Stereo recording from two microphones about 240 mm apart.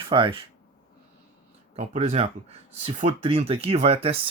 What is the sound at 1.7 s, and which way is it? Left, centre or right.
Speech, right.